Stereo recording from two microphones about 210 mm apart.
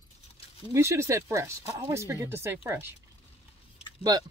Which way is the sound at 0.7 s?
15° right (ahead or behind).